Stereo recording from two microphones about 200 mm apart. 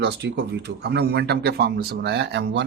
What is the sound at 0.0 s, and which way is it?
Speech, 60° right (ahead or behind).